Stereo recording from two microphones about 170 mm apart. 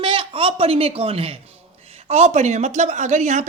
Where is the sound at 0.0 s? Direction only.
30° right (ahead or behind).